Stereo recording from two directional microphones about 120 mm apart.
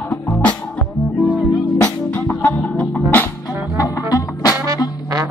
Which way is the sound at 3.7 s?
30° left (ahead or behind).